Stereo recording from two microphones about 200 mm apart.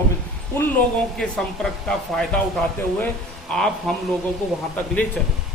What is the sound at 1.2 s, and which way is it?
Speech, 5° left (ahead or behind).